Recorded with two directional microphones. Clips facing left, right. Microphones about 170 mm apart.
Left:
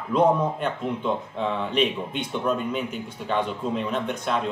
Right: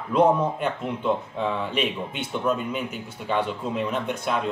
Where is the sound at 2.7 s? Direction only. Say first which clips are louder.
Left 1 dB; 5° right (ahead or behind).